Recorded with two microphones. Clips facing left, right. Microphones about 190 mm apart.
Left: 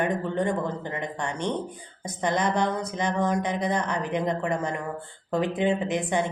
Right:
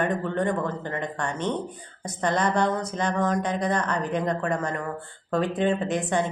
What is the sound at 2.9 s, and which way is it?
Speech, 15° left (ahead or behind).